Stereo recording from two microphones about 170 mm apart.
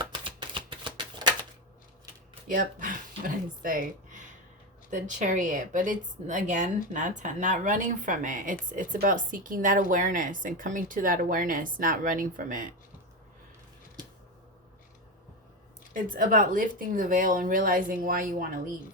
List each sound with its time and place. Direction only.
0.0 s shuffling cards: 30° right (ahead or behind)
2.5 s a woman's voice: 50° right (ahead or behind)
15.9 s speech: 55° right (ahead or behind)